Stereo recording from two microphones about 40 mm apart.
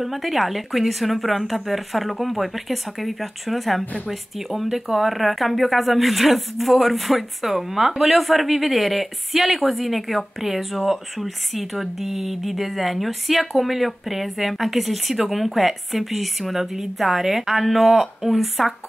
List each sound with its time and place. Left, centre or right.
0.0 s speech: centre
3.8 s a woman's voice: left
4.1 s speech: centre